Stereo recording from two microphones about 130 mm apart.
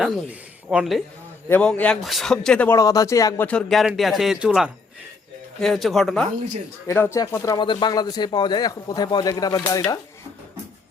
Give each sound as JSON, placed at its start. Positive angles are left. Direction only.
{"t": 0.0, "sound": "speech", "side_deg": -10}
{"t": 1.5, "sound": "a man's voice", "side_deg": 10}
{"t": 2.6, "sound": "speech", "side_deg": 25}
{"t": 3.4, "sound": "speech", "side_deg": 5}
{"t": 6.8, "sound": "speech", "side_deg": 20}
{"t": 7.6, "sound": "a man's voice", "side_deg": 35}